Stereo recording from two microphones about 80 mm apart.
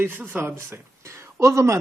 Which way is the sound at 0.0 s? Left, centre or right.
Right.